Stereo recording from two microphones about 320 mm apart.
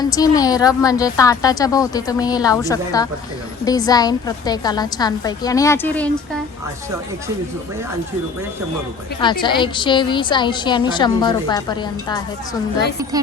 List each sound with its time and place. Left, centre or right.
0.0 s a woman's voice: centre
9.2 s a woman's voice: centre